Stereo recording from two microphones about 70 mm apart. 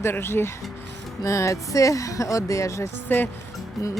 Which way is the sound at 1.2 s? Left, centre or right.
Left.